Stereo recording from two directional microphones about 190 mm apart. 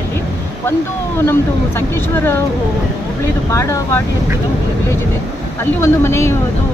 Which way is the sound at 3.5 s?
15° left (ahead or behind).